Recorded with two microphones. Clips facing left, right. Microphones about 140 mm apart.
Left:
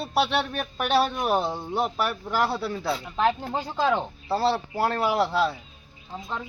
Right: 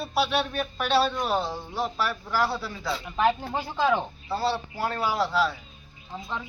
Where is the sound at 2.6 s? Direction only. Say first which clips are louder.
Left 5 dB; 60° left (ahead or behind).